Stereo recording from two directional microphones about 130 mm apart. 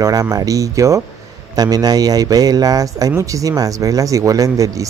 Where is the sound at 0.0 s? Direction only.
25° right (ahead or behind).